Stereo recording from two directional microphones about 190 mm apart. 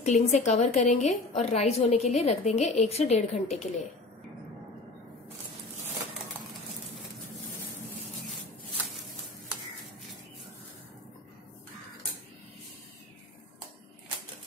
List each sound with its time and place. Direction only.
0.0 s a woman's voice: 35° left (ahead or behind)